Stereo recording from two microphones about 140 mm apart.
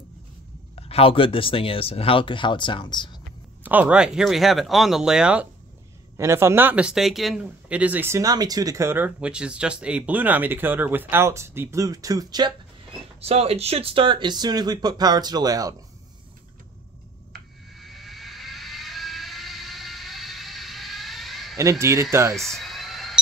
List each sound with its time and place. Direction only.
0.7 s speech: 45° left (ahead or behind)
3.6 s speech: 10° right (ahead or behind)
6.1 s speech: 20° right (ahead or behind)
13.2 s speech: 45° right (ahead or behind); by 15.7 s 25° right (ahead or behind)
17.7 s vehicle: centre (ahead or behind)
21.5 s speech: 20° right (ahead or behind)
22.4 s a sound: centre (ahead or behind)